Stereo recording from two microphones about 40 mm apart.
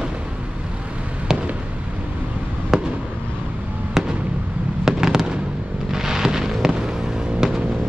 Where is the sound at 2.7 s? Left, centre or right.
Centre.